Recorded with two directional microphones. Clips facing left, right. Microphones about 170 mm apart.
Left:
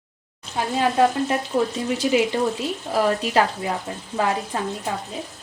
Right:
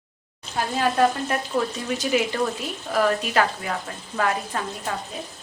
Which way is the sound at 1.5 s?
20° left (ahead or behind).